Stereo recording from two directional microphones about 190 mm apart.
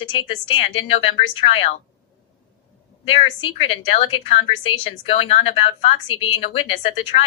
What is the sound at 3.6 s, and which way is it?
A woman's voice, 30° left (ahead or behind).